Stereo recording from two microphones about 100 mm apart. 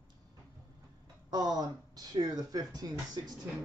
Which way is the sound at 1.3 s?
40° right (ahead or behind).